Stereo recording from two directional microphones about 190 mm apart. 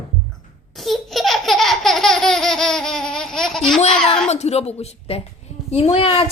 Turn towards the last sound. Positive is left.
turn(degrees=30)  # may be behind; listen again after turning